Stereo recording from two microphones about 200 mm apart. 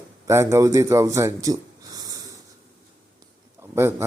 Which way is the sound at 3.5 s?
15° right (ahead or behind).